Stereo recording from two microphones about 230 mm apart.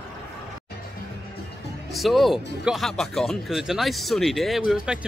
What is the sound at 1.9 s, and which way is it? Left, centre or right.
Speech, centre.